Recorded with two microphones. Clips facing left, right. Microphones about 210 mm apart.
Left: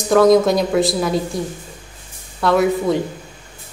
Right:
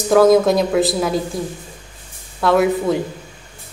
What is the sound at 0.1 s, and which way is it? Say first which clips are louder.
Speech: even; centre (ahead or behind).